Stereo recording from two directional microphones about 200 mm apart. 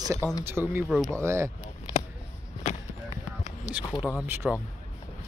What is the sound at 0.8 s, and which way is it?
Speech, centre (ahead or behind).